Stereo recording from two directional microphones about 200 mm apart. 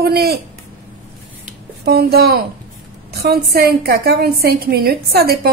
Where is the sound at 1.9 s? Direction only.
50° right (ahead or behind).